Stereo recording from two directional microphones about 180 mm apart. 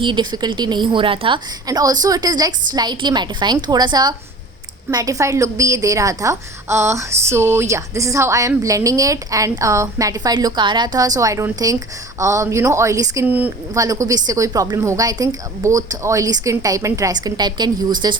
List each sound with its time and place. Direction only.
0.0 s a woman's voice: 25° right (ahead or behind)